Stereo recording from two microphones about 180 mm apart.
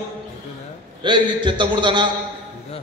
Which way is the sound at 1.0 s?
25° right (ahead or behind).